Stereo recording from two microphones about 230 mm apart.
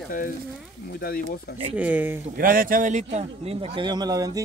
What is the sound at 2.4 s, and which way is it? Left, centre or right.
Speech, right.